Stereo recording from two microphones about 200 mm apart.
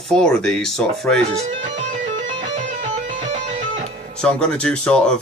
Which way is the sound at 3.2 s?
35° right (ahead or behind).